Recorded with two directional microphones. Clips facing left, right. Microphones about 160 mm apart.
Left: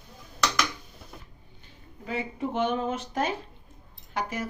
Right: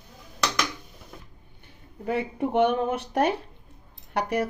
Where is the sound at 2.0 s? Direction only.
60° right (ahead or behind).